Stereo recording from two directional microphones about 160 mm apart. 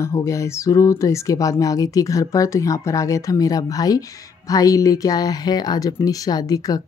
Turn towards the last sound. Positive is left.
turn(degrees=25)  # may be behind; listen again after turning